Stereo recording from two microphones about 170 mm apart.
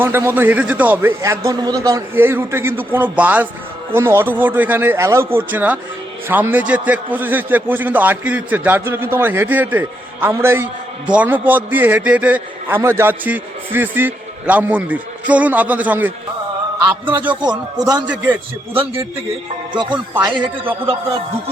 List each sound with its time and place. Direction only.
0.0 s a man's voice: 15° right (ahead or behind)
17.4 s speech: 25° right (ahead or behind)
18.1 s a man's voice: 10° right (ahead or behind)
20.1 s speech: 30° right (ahead or behind)